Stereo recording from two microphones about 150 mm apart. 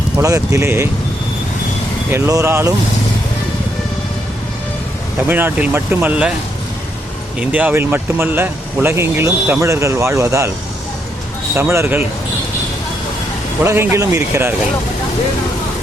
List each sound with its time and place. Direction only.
0.2 s speech: 20° right (ahead or behind)
2.0 s speech: 15° right (ahead or behind)
5.3 s speech: 15° right (ahead or behind)
7.3 s speech: 10° right (ahead or behind)
11.5 s speech: 15° right (ahead or behind)
13.7 s speech: 20° right (ahead or behind)